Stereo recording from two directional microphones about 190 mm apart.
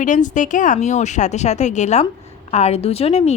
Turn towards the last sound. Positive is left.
turn(degrees=35)  # may be behind; listen again after turning